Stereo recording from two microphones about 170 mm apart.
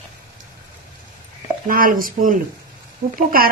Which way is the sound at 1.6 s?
55° right (ahead or behind).